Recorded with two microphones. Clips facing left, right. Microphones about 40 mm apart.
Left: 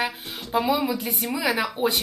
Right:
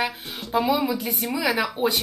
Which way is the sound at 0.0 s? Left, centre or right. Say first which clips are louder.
Right 1 dB; centre.